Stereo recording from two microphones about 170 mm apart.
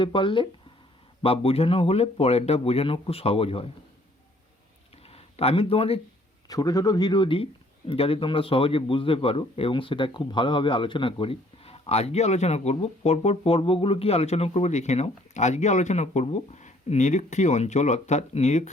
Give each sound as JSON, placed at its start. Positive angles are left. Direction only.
{"t": 0.0, "sound": "a man's voice", "side_deg": 30}
{"t": 5.0, "sound": "a sound", "side_deg": 35}
{"t": 6.5, "sound": "a man's voice", "side_deg": 20}